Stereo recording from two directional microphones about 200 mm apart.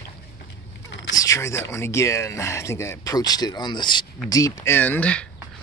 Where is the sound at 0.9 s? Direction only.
65° left (ahead or behind).